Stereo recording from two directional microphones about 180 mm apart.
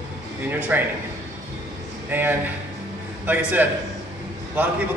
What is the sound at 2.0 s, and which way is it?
A man's voice, 10° right (ahead or behind).